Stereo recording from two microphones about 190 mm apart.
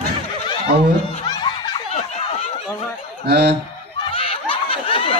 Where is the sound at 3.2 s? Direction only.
60° right (ahead or behind).